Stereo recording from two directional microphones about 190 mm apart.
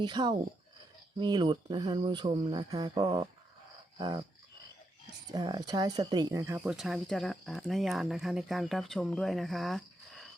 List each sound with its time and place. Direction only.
0.0 s speech: 20° right (ahead or behind)
3.9 s dog: 25° right (ahead or behind)
5.3 s speech: 20° right (ahead or behind)
6.6 s speech: centre (ahead or behind)